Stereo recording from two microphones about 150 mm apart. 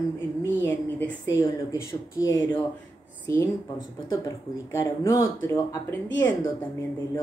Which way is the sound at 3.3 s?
20° left (ahead or behind).